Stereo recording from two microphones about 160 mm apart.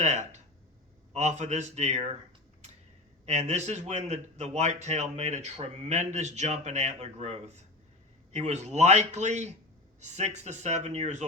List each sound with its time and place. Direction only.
0.0 s speech: 45° right (ahead or behind)
3.2 s speech: 45° right (ahead or behind)